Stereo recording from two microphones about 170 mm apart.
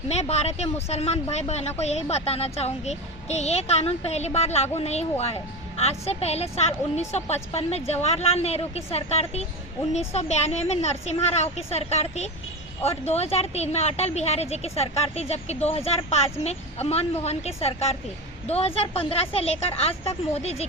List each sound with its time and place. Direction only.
0.1 s a child's voice: 40° left (ahead or behind)